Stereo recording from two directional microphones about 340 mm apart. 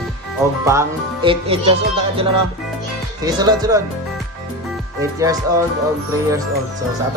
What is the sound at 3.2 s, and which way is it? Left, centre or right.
Music, centre.